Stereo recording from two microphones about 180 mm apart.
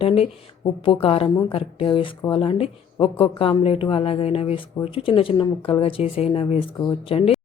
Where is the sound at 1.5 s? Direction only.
30° left (ahead or behind).